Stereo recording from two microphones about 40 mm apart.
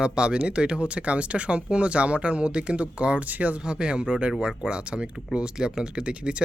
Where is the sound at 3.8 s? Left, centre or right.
Right.